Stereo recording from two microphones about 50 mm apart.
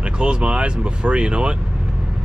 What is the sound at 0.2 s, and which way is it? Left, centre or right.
Speech, centre.